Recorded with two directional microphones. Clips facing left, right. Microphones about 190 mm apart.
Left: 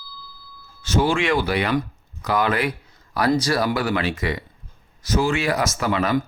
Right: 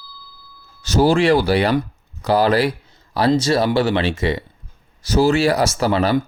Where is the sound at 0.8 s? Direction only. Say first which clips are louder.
Right 5 dB; 40° right (ahead or behind).